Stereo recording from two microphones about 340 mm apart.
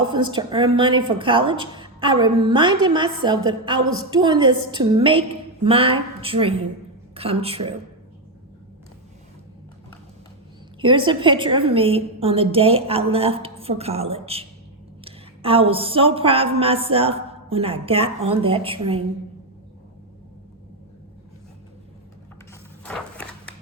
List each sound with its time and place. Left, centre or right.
0.0 s a woman's voice: centre
10.8 s a woman's voice: centre
22.8 s a sound: centre